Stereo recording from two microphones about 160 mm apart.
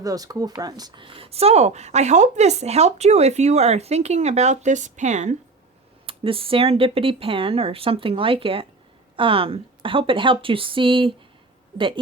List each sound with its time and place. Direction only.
0.0 s speech: 20° right (ahead or behind); by 5.4 s 45° right (ahead or behind)
6.1 s speech: 35° right (ahead or behind)